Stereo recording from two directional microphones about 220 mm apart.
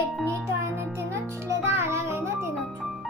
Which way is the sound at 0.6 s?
10° right (ahead or behind).